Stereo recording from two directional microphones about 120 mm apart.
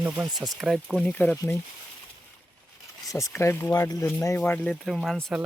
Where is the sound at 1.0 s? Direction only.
15° left (ahead or behind).